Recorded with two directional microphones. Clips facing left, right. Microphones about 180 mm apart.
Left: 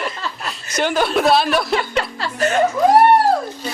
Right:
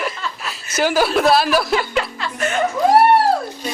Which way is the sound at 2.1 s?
35° left (ahead or behind).